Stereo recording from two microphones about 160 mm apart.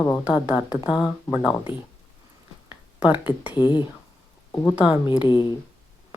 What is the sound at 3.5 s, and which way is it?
Speech, 30° left (ahead or behind).